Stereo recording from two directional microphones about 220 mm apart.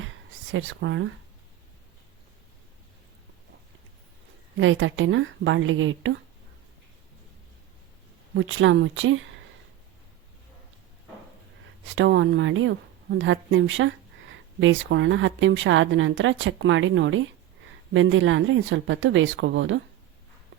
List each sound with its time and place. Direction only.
0.5 s speech: 60° right (ahead or behind)
4.5 s speech: 60° right (ahead or behind)
8.4 s speech: 60° right (ahead or behind)
11.9 s speech: 60° right (ahead or behind)